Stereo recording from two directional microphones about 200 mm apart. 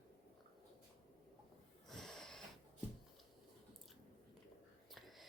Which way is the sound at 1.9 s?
Centre (ahead or behind).